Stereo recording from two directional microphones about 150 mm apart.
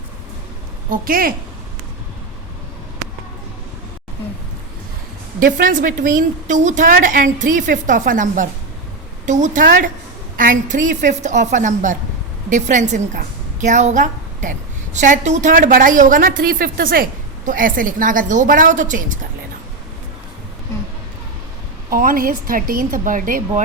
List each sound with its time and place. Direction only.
0.9 s a woman's voice: 75° right (ahead or behind)
5.4 s a woman's voice: 65° right (ahead or behind)
21.8 s a woman's voice: 70° right (ahead or behind)